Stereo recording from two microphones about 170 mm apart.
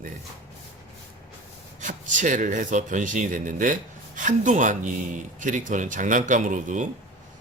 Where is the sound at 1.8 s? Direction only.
50° right (ahead or behind).